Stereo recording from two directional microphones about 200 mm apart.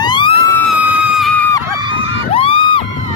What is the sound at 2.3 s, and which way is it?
Music, 25° left (ahead or behind).